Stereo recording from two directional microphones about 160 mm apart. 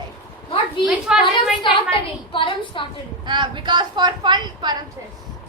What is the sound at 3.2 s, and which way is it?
A woman's voice, 30° right (ahead or behind).